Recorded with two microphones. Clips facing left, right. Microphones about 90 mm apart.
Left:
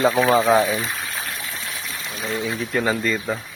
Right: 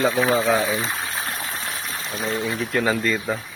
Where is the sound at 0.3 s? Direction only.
25° left (ahead or behind).